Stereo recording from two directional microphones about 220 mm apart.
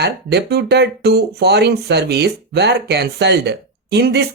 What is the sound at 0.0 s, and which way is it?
Speech, 50° right (ahead or behind).